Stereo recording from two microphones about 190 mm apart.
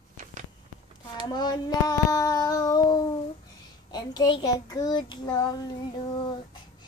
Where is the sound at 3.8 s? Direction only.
20° left (ahead or behind).